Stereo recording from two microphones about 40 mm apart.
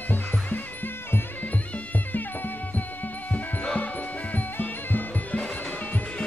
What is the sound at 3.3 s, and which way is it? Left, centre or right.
Music, left.